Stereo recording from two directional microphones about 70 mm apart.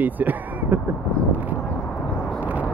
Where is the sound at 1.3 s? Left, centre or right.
Right.